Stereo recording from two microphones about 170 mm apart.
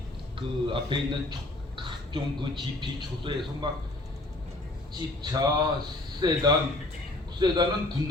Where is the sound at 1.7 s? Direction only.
30° right (ahead or behind).